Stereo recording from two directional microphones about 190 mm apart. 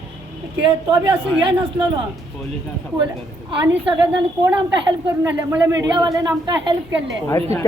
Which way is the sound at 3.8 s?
10° right (ahead or behind).